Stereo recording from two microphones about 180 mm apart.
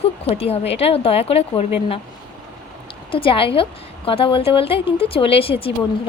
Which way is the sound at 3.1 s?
30° left (ahead or behind).